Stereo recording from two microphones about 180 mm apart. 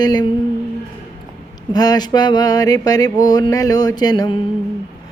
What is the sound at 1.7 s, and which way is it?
Mantra, 20° left (ahead or behind).